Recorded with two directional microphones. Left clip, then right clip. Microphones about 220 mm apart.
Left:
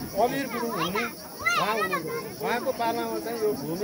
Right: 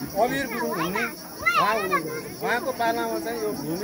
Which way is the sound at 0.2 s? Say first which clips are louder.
Right 2 dB; centre (ahead or behind).